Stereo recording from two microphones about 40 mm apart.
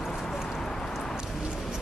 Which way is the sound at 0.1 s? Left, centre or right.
Centre.